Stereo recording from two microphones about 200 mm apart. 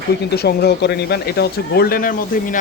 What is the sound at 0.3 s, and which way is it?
Speech, 55° left (ahead or behind).